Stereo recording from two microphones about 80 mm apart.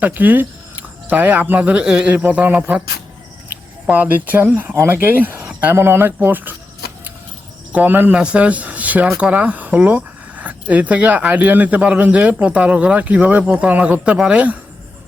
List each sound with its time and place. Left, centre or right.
0.0 s speech: right
7.7 s speech: right
8.1 s speech: centre